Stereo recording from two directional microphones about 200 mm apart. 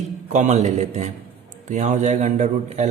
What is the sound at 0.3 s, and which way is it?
A man's voice, 35° right (ahead or behind).